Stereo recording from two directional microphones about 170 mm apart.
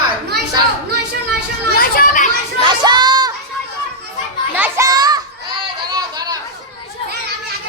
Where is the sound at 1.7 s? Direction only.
60° left (ahead or behind).